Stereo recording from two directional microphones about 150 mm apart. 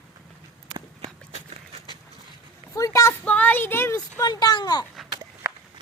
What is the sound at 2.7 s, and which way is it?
A woman's voice, 20° left (ahead or behind).